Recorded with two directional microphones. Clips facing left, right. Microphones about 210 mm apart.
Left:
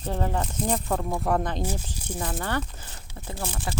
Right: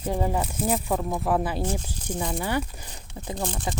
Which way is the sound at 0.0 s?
10° right (ahead or behind).